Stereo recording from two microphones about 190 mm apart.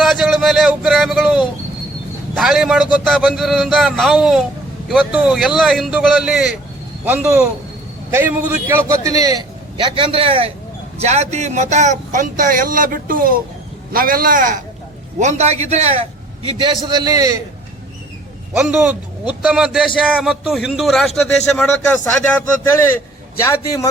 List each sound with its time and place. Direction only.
0.0 s a sound: centre (ahead or behind)
2.3 s vehicle: centre (ahead or behind)
2.9 s a man's voice: 5° right (ahead or behind); by 16.0 s 35° right (ahead or behind)
16.5 s a man's voice: 25° right (ahead or behind)
18.5 s a man's voice: 10° right (ahead or behind); by 23.9 s 20° left (ahead or behind)